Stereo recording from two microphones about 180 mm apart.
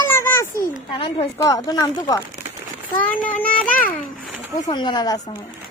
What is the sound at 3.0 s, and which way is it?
Speech, 10° left (ahead or behind).